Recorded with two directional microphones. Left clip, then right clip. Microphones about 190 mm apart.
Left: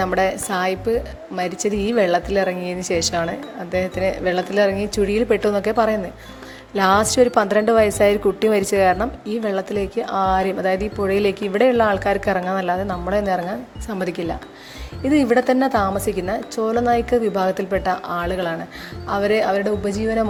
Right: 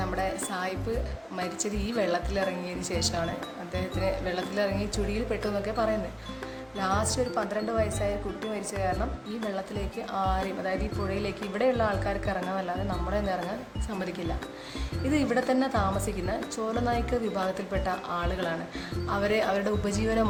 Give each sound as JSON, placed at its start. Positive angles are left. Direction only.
{"t": 0.0, "sound": "a woman's voice", "side_deg": 45}